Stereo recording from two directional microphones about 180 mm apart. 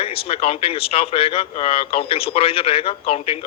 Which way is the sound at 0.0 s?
30° left (ahead or behind).